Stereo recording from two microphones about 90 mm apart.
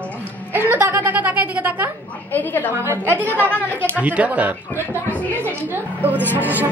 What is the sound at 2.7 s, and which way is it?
A woman's voice, 25° right (ahead or behind).